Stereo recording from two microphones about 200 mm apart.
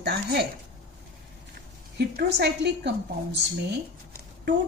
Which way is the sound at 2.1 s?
55° right (ahead or behind).